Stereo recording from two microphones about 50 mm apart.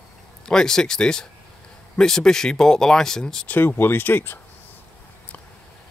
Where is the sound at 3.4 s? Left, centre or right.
Left.